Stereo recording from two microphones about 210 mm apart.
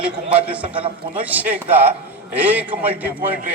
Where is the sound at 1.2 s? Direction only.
10° right (ahead or behind).